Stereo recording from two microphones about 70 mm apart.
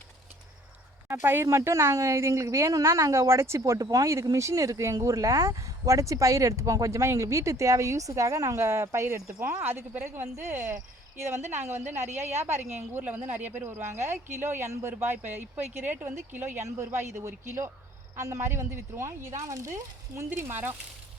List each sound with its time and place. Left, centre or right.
1.0 s speech: right
9.6 s speech: right